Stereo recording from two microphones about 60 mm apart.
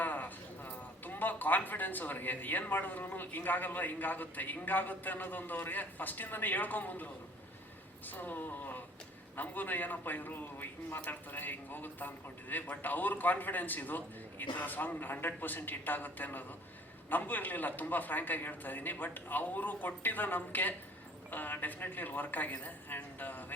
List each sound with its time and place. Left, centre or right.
0.0 s a man's voice: left